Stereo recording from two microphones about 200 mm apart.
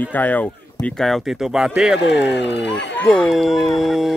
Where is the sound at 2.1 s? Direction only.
60° left (ahead or behind).